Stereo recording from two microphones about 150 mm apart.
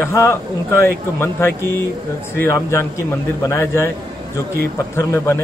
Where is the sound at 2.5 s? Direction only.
20° left (ahead or behind).